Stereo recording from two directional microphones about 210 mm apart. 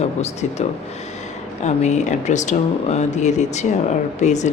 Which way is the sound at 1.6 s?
35° left (ahead or behind).